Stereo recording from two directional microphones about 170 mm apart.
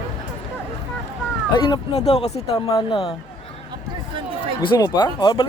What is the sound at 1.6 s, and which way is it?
Speech, 25° left (ahead or behind).